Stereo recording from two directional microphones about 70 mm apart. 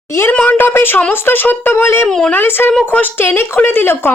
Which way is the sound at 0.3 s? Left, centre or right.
Left.